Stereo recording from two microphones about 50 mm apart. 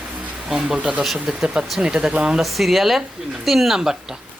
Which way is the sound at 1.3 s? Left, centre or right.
Centre.